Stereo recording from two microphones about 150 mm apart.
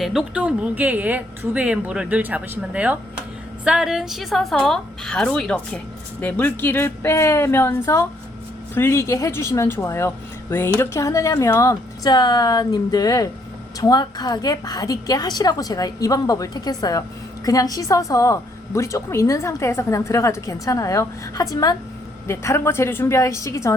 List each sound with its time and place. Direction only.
0.0 s a woman's voice: centre (ahead or behind); by 23.7 s 20° left (ahead or behind)